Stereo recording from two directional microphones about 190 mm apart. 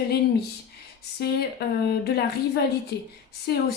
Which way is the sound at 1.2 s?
60° left (ahead or behind).